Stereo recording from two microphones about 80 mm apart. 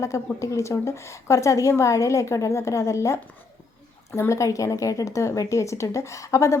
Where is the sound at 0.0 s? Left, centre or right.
Left.